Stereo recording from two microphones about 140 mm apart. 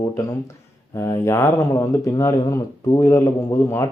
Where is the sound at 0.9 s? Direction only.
20° left (ahead or behind).